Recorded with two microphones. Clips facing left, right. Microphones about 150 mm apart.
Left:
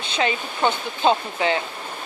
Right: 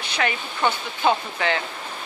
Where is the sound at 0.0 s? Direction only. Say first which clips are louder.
Left 2 dB; 25° left (ahead or behind).